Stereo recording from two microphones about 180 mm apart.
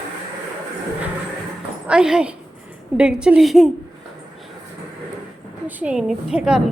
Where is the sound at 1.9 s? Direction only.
5° right (ahead or behind).